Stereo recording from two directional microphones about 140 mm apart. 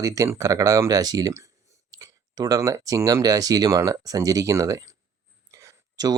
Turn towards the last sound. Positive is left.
turn(degrees=-25)  # may be behind; listen again after turning